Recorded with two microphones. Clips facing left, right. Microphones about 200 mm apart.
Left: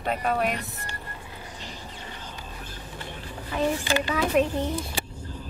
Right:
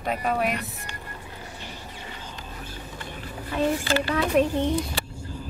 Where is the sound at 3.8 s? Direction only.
15° left (ahead or behind).